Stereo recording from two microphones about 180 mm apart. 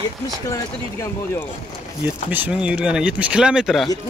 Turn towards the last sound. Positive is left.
turn(degrees=0)  # may be behind; listen again after turning